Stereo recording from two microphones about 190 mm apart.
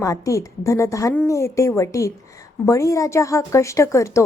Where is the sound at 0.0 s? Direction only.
20° left (ahead or behind).